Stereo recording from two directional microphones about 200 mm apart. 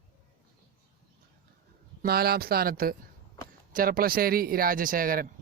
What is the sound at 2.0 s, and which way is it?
Speech, 50° right (ahead or behind).